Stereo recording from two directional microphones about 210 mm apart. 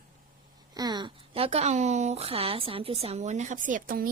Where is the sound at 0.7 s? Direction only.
20° right (ahead or behind).